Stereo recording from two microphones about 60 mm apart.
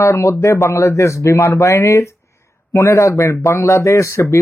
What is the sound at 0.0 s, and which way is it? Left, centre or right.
Speech, left.